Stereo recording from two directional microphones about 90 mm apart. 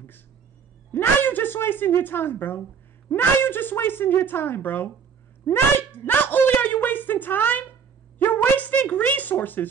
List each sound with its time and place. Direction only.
0.9 s a woman's voice: 20° left (ahead or behind)
5.4 s a sound: 25° left (ahead or behind)
8.2 s speech: 25° left (ahead or behind)